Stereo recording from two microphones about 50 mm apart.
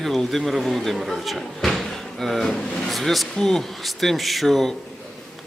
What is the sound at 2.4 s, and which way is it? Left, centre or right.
Speech, centre.